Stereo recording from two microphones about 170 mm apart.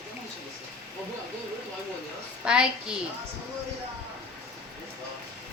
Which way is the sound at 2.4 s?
5° right (ahead or behind).